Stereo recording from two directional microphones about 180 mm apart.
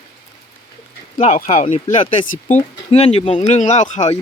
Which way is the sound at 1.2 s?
45° left (ahead or behind).